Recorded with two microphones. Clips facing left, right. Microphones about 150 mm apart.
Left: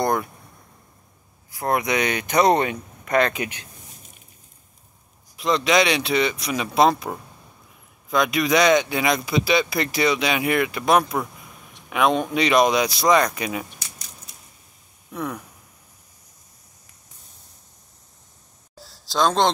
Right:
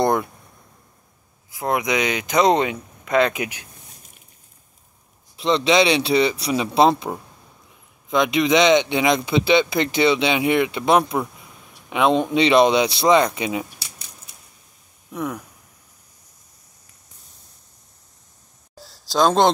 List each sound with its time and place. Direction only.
0.0 s a sound: 20° right (ahead or behind)
1.6 s speech: 15° right (ahead or behind)
5.4 s speech: 25° right (ahead or behind)
8.1 s speech: 20° right (ahead or behind)
15.1 s speech: 5° right (ahead or behind)
19.0 s speech: 5° right (ahead or behind)